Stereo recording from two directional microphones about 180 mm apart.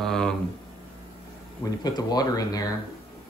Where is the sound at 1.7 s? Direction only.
20° left (ahead or behind).